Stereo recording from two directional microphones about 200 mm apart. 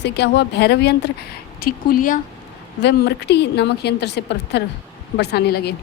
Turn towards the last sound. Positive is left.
turn(degrees=55)  # may be behind; listen again after turning